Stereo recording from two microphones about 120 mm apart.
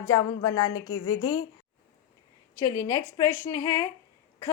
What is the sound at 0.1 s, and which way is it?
A woman's voice, 35° left (ahead or behind).